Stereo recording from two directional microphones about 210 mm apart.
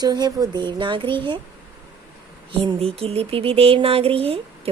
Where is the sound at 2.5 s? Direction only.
25° right (ahead or behind).